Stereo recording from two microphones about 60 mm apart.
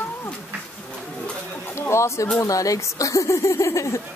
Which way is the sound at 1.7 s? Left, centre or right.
Left.